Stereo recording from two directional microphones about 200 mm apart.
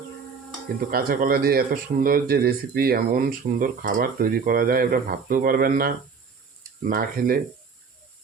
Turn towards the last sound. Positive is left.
turn(degrees=-45)  # may be behind; listen again after turning